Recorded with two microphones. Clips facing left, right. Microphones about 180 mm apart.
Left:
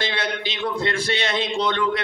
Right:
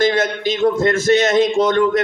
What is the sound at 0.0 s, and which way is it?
A man's voice, 45° right (ahead or behind).